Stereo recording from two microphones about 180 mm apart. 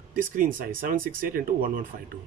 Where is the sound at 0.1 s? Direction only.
50° right (ahead or behind).